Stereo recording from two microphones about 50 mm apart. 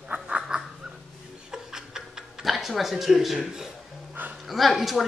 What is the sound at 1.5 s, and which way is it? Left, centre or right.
Tick-tock, centre.